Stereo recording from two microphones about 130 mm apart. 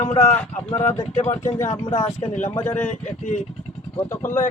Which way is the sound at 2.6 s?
15° left (ahead or behind).